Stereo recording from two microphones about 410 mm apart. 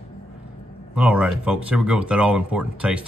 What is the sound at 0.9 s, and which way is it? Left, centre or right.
Speech, centre.